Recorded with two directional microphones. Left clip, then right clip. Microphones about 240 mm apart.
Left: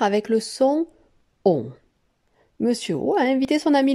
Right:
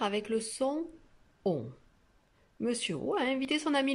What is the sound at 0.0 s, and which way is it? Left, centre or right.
Speech, left.